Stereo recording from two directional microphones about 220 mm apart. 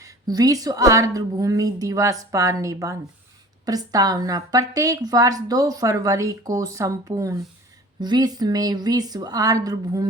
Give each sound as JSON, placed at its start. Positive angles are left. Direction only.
{"t": 0.0, "sound": "a woman's voice", "side_deg": -15}